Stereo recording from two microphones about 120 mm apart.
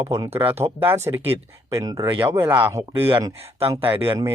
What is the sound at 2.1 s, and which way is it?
Speech, 20° right (ahead or behind).